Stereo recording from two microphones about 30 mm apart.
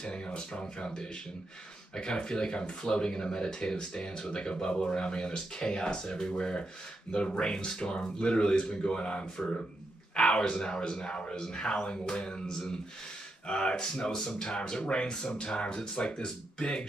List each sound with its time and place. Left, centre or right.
0.0 s speech: left
14.1 s speech: left